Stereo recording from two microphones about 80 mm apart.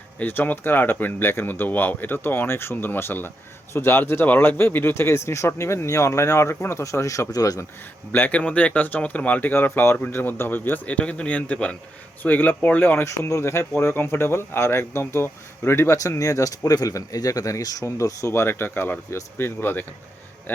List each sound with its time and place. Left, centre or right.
0.2 s speech: left
8.1 s speech: centre
13.1 s speech: left